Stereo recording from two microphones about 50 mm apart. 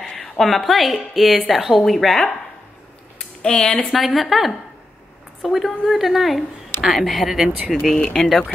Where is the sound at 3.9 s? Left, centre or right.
Centre.